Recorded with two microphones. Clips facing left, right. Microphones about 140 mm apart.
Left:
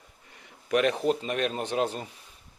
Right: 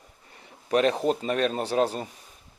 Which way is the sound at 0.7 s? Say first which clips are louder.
Right 2 dB; 35° right (ahead or behind).